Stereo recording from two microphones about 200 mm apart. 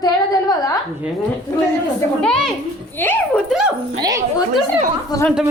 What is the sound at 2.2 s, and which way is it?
A woman's voice, 5° left (ahead or behind).